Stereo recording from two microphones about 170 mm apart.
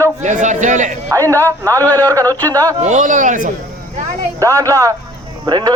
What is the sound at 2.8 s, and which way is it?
Speech, 45° right (ahead or behind).